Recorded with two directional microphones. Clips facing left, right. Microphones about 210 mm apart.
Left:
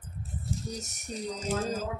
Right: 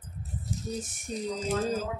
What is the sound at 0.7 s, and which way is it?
Speech, 50° right (ahead or behind).